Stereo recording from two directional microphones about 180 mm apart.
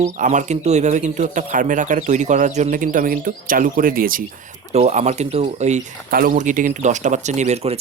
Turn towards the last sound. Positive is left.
turn(degrees=-35)  # may be behind; listen again after turning